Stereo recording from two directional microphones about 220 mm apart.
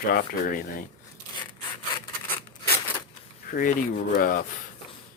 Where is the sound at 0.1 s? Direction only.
40° left (ahead or behind).